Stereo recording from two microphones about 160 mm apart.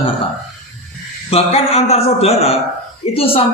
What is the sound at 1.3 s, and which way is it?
A man's voice, 40° left (ahead or behind).